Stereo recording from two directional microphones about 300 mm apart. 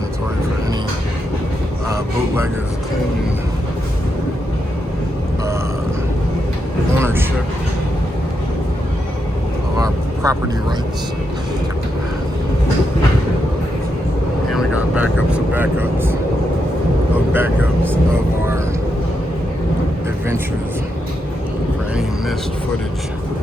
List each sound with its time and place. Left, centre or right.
1.9 s a sound: centre
7.0 s a sound: centre
9.7 s vehicle: centre
14.5 s vehicle: centre
15.3 s speech: centre
17.3 s speech: centre